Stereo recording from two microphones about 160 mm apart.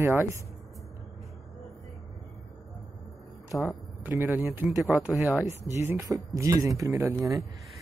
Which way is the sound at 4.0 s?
10° right (ahead or behind).